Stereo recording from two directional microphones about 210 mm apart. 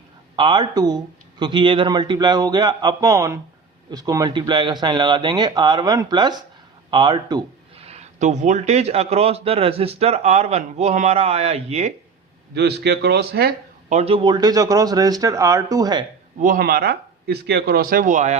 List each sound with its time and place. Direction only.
0.3 s a man's voice: 20° right (ahead or behind)
7.9 s speech: 35° right (ahead or behind)
12.5 s speech: 50° right (ahead or behind)
13.9 s speech: 30° right (ahead or behind)
16.4 s speech: 40° right (ahead or behind)